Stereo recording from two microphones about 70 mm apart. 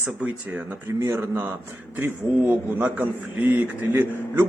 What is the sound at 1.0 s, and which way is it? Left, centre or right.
Speech, right.